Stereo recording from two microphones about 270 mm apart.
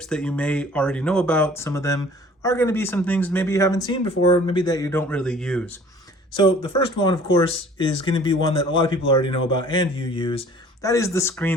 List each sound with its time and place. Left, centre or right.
0.1 s speech: centre
6.4 s speech: centre